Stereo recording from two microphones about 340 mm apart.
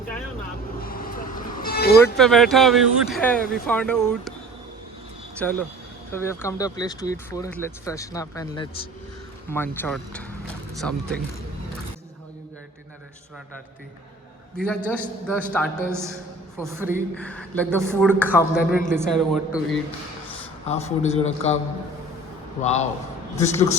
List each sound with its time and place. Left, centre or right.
0.8 s vehicle: left
2.1 s speech: centre
5.4 s speech: centre
14.6 s speech: centre
15.9 s a woman's voice: centre
17.2 s speech: centre
18.6 s a man's voice: left
18.9 s speech: centre
20.7 s a man's voice: centre
22.6 s a man's voice: centre